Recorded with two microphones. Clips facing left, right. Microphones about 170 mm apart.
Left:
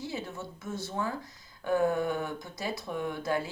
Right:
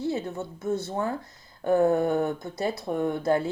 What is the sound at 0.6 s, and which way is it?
Speech, 60° right (ahead or behind).